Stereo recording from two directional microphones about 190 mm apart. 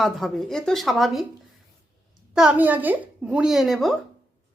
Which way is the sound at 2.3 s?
5° right (ahead or behind).